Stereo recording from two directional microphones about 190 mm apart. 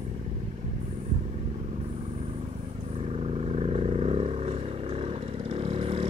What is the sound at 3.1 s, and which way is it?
Vehicle, 30° right (ahead or behind).